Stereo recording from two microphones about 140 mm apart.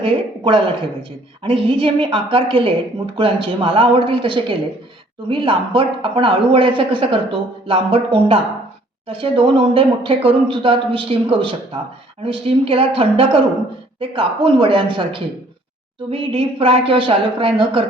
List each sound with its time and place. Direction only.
0.0 s speech: 35° right (ahead or behind)